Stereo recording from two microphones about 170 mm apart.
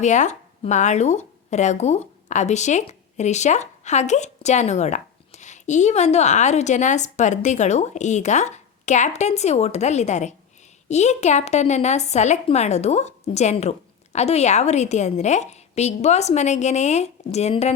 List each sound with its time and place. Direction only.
0.0 s a woman's voice: 45° left (ahead or behind)